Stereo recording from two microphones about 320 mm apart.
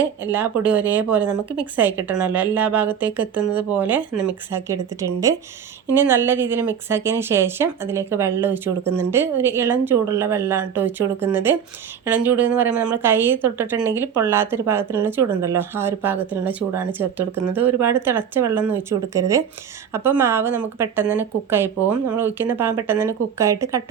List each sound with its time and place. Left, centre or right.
0.0 s a woman's voice: centre